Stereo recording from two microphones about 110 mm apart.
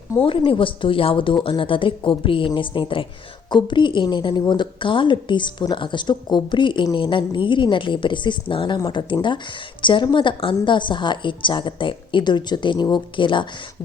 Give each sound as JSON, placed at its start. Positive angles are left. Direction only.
{"t": 0.3, "sound": "a woman's voice", "side_deg": 50}